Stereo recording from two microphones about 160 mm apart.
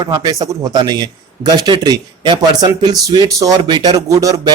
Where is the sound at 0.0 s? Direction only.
25° right (ahead or behind).